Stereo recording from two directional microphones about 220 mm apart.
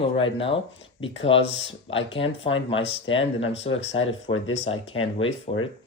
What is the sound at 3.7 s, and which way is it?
Speech, 65° left (ahead or behind).